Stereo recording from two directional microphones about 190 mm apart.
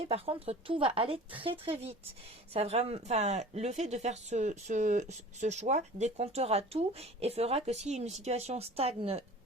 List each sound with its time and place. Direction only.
0.1 s a woman's voice: 30° right (ahead or behind)